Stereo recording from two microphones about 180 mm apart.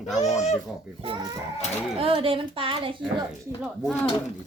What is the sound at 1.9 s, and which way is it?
A child's voice, 30° right (ahead or behind).